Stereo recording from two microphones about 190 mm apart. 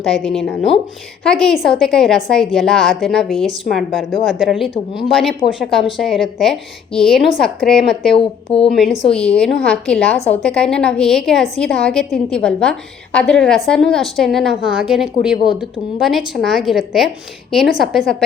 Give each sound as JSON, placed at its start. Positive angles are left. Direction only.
{"t": 0.0, "sound": "a woman's voice", "side_deg": 0}
{"t": 8.1, "sound": "speech", "side_deg": 30}
{"t": 8.7, "sound": "a woman's voice", "side_deg": 0}